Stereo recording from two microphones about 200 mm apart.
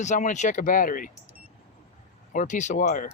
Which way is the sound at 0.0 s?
35° left (ahead or behind).